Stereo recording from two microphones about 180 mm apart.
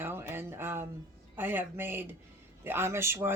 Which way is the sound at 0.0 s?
15° right (ahead or behind).